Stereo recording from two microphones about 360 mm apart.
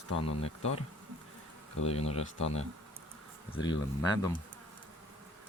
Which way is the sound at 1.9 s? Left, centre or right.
Centre.